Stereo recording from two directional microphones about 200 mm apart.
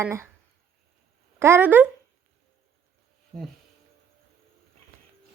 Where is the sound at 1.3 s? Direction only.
10° right (ahead or behind).